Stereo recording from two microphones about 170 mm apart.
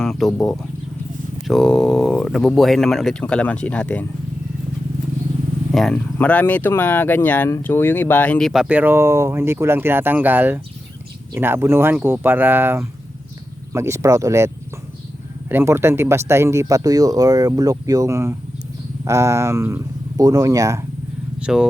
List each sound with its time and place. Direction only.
0.0 s speech: centre (ahead or behind)
1.5 s speech: centre (ahead or behind)
5.7 s speech: 5° left (ahead or behind); by 20.8 s 20° right (ahead or behind)
21.4 s speech: 5° right (ahead or behind)